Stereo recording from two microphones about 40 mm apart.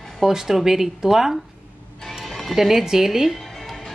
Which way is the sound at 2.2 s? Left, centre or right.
Centre.